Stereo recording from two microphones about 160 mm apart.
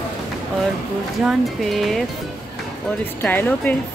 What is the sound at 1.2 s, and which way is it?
Speech, centre (ahead or behind).